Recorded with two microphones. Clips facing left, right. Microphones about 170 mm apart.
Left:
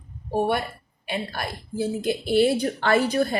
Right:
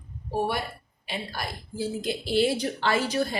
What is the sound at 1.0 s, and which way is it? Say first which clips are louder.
A woman's voice: left 4 dB; 60° left (ahead or behind).